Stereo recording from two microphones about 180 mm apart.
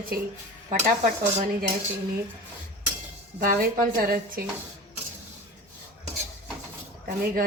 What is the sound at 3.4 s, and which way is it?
A woman's voice, 50° right (ahead or behind).